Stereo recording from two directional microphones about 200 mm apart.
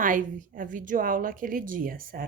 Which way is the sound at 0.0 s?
40° right (ahead or behind).